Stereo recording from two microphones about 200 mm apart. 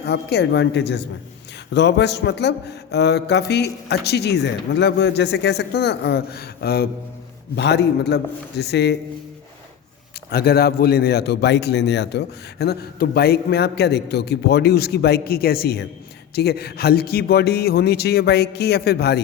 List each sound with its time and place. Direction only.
0.0 s speech: 55° left (ahead or behind)
10.3 s a man's voice: 50° left (ahead or behind)